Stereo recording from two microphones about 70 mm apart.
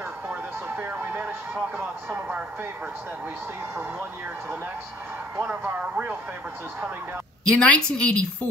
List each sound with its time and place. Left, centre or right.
0.3 s a sound: right
5.4 s a man's voice: right
7.4 s a woman's voice: centre